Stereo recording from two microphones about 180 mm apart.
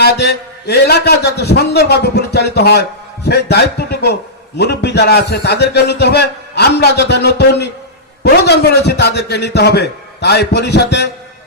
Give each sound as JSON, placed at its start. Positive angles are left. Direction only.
{"t": 0.0, "sound": "a man's voice", "side_deg": 65}